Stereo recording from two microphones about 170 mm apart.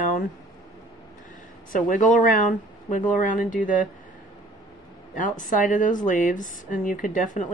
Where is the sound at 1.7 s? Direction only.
50° left (ahead or behind).